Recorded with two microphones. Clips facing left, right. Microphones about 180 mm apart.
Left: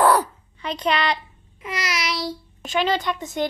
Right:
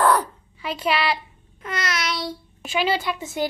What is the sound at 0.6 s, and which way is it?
Child singing, 5° right (ahead or behind).